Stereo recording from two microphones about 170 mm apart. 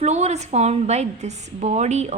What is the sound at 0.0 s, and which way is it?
A woman's voice, 40° right (ahead or behind).